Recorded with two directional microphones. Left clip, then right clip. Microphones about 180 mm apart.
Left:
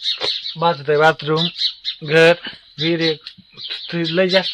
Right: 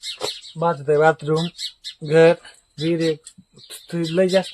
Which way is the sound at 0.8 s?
5° left (ahead or behind).